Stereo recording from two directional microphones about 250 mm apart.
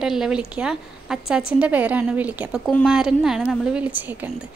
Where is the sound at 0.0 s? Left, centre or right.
Centre.